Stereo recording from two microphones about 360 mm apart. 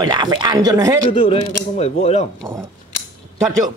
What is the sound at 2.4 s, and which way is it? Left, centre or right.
Speech, centre.